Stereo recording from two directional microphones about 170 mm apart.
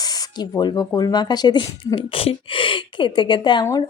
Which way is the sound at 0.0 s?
20° left (ahead or behind).